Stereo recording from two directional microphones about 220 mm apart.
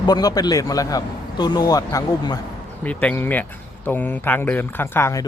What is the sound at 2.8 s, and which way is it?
Speech, 5° left (ahead or behind).